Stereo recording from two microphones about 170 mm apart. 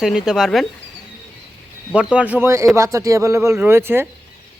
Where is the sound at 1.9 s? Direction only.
5° right (ahead or behind).